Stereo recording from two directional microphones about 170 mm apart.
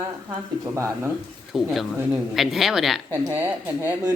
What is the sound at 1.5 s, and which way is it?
Speech, centre (ahead or behind).